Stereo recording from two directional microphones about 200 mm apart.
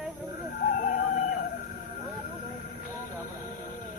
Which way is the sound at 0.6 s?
40° left (ahead or behind).